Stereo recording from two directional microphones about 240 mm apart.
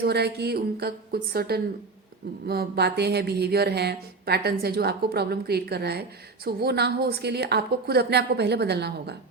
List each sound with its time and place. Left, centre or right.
0.0 s a woman's voice: right